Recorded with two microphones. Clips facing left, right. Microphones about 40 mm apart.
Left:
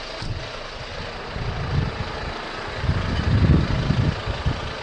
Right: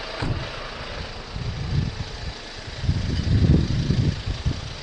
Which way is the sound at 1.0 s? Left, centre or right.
Left.